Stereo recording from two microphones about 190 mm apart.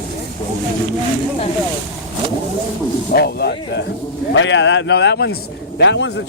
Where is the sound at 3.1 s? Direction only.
60° left (ahead or behind).